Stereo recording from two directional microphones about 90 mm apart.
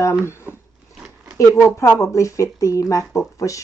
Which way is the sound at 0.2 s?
30° left (ahead or behind).